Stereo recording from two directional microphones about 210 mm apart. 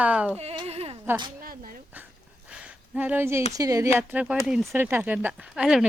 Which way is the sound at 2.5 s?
5° right (ahead or behind).